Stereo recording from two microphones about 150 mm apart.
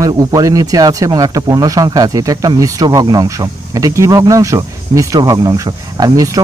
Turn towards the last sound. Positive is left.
turn(degrees=-25)  # may be behind; listen again after turning